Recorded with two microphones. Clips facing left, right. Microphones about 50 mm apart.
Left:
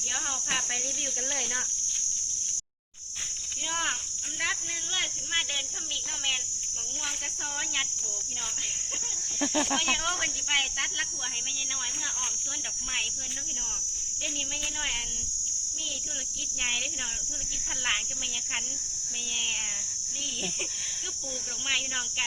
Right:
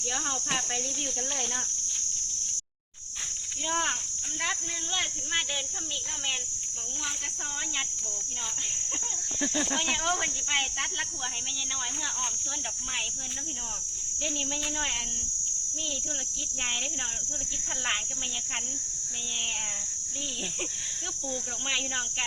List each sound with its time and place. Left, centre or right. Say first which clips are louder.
9.4 s speech: left 2 dB; left
9.6 s speech: even; left